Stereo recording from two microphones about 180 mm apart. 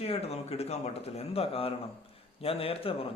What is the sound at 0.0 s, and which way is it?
Speech, 35° left (ahead or behind).